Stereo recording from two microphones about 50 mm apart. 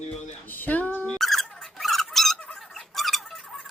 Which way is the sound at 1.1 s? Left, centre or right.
Centre.